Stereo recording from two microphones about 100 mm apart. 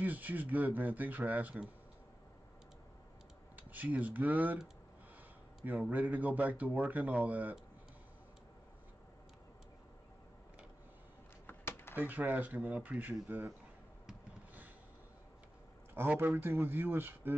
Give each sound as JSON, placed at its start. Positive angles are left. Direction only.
{"t": 0.0, "sound": "speech", "side_deg": -15}
{"t": 3.5, "sound": "speech", "side_deg": -15}
{"t": 5.7, "sound": "speech", "side_deg": -15}
{"t": 11.4, "sound": "a sound", "side_deg": 25}
{"t": 11.9, "sound": "speech", "side_deg": -20}
{"t": 15.9, "sound": "speech", "side_deg": -20}